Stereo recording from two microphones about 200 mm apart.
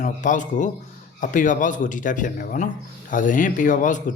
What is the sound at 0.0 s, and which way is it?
Speech, 40° left (ahead or behind).